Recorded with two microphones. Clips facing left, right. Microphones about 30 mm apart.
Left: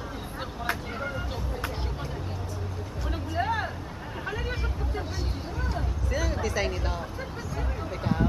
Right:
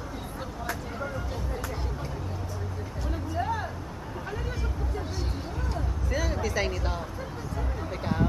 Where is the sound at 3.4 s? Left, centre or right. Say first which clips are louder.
Left 3 dB; left.